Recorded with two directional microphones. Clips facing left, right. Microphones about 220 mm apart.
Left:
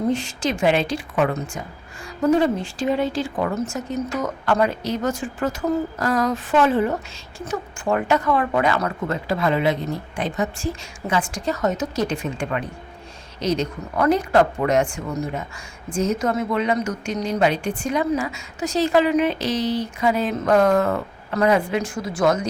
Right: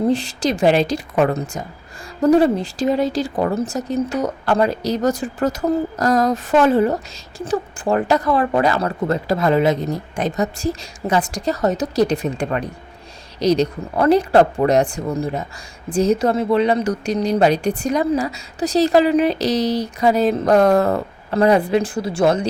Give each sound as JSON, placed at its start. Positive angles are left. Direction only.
{"t": 0.1, "sound": "speech", "side_deg": -35}